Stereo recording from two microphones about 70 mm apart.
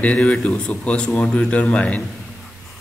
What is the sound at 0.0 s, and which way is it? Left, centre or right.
A man's voice, centre.